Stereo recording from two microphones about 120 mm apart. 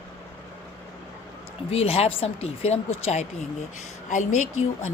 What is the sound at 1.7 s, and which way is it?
Speech, 55° left (ahead or behind).